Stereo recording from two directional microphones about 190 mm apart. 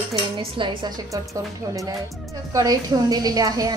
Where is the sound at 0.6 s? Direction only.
20° right (ahead or behind).